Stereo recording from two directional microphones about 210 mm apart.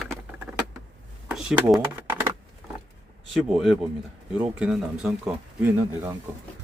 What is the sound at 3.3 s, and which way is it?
Speech, centre (ahead or behind).